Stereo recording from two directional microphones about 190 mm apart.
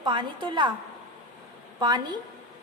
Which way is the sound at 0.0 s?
25° right (ahead or behind).